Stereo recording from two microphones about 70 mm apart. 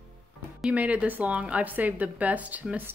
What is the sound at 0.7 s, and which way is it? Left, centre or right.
A woman's voice, right.